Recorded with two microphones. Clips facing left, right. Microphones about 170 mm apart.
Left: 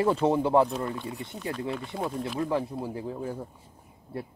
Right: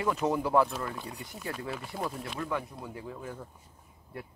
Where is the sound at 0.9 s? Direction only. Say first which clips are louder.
Left 5 dB; centre (ahead or behind).